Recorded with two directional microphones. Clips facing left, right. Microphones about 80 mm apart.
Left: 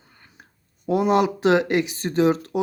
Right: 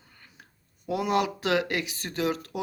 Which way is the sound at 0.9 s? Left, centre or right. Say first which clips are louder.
Left 7 dB; left.